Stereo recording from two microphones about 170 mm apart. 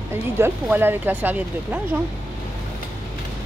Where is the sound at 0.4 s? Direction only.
10° right (ahead or behind).